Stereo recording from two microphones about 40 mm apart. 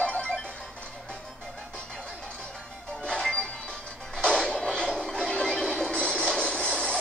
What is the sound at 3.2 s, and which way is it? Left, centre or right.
Music, centre.